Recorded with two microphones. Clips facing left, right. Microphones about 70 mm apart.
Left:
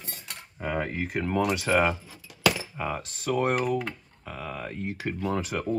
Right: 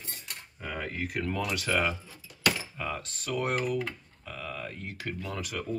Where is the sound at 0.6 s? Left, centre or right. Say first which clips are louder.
Left 6 dB; left.